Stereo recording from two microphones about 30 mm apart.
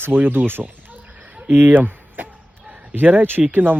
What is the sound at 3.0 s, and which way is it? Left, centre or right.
Speech, right.